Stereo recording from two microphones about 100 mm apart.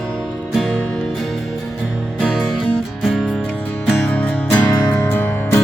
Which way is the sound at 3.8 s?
15° left (ahead or behind).